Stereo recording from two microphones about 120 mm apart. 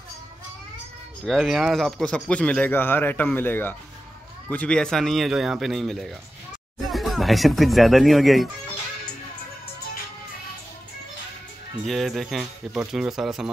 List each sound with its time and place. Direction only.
1.2 s a man's voice: centre (ahead or behind)
11.8 s speech: centre (ahead or behind)